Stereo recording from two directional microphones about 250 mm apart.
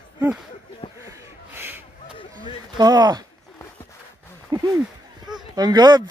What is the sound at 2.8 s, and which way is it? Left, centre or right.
Speech, centre.